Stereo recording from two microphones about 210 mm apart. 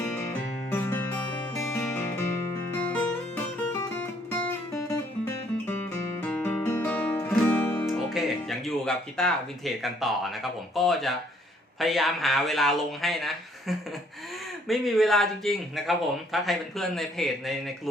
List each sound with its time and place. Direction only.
0.7 s music: 10° left (ahead or behind)
1.1 s music: 20° left (ahead or behind)
2.7 s music: 10° left (ahead or behind)
11.8 s a man's voice: centre (ahead or behind)